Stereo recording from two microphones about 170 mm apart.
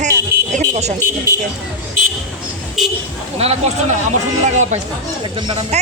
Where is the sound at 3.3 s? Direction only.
35° right (ahead or behind).